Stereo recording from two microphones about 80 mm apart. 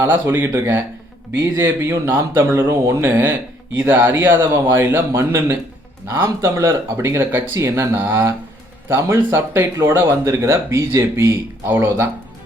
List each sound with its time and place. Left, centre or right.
0.1 s speech: right